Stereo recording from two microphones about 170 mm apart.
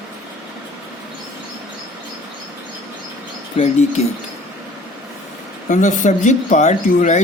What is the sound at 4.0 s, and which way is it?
Speech, 40° left (ahead or behind).